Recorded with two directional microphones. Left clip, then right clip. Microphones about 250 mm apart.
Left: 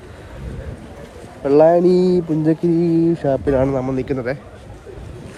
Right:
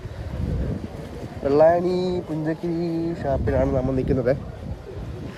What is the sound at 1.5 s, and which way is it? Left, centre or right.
Speech, left.